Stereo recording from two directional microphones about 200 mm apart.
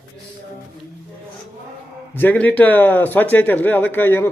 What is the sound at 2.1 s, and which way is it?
Speech, 10° left (ahead or behind).